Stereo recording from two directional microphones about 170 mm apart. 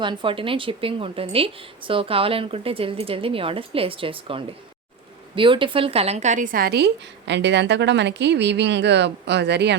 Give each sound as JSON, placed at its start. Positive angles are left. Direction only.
{"t": 0.0, "sound": "a woman's voice", "side_deg": -30}